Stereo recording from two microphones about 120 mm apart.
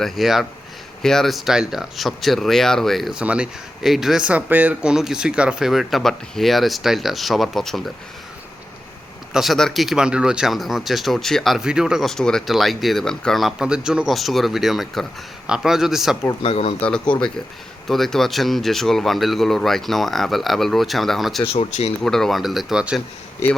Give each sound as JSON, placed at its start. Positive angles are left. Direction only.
{"t": 0.0, "sound": "speech", "side_deg": 0}
{"t": 9.3, "sound": "speech", "side_deg": 0}
{"t": 16.4, "sound": "speech", "side_deg": 55}
{"t": 16.8, "sound": "speech", "side_deg": 10}
{"t": 21.4, "sound": "speech", "side_deg": 55}
{"t": 22.0, "sound": "speech", "side_deg": 5}